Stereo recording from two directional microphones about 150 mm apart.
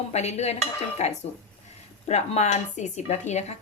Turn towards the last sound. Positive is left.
turn(degrees=50)  # may be behind; listen again after turning